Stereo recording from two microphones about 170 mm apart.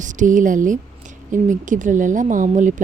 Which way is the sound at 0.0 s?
45° right (ahead or behind).